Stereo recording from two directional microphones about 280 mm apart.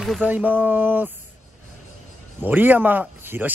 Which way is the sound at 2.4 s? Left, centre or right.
Centre.